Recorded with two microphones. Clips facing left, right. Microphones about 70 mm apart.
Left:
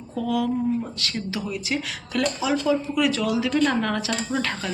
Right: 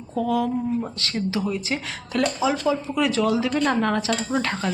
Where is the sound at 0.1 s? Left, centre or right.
Right.